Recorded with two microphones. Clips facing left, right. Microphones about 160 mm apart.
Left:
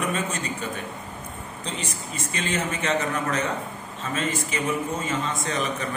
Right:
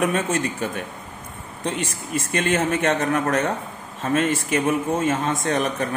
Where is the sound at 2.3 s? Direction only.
55° right (ahead or behind).